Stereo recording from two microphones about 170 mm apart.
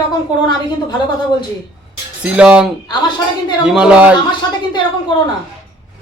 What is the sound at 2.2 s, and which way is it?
A man's voice, 5° right (ahead or behind).